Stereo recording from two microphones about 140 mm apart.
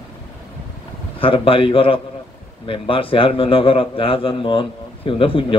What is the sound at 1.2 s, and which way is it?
A man's voice, 40° left (ahead or behind).